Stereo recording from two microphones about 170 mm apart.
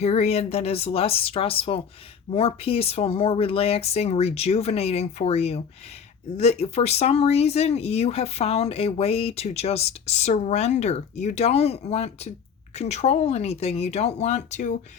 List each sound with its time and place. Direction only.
0.0 s speech: 40° left (ahead or behind)